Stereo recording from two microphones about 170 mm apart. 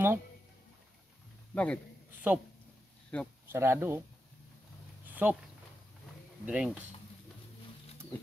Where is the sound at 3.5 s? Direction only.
15° right (ahead or behind).